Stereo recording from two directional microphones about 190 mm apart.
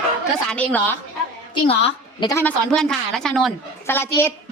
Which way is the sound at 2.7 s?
5° left (ahead or behind).